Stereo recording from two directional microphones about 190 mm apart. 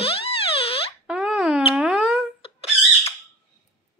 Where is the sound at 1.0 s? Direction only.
5° right (ahead or behind).